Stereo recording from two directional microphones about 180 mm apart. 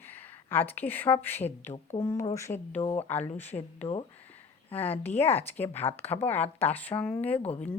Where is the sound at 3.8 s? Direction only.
30° left (ahead or behind).